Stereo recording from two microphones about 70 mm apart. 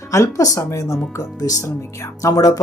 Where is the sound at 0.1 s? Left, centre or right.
Left.